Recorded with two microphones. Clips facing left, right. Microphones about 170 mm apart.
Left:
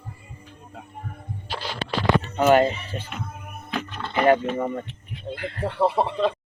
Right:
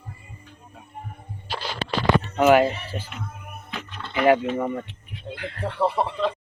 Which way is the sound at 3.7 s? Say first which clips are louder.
Left 6 dB; 50° left (ahead or behind).